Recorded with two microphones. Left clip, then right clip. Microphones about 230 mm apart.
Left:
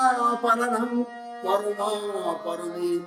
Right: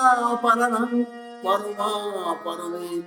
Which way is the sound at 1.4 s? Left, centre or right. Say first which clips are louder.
Right 1 dB; centre.